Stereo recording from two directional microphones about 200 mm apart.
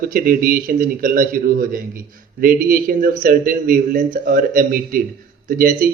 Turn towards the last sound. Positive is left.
turn(degrees=-45)  # may be behind; listen again after turning